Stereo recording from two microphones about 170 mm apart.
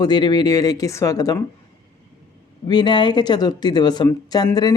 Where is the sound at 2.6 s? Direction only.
25° left (ahead or behind).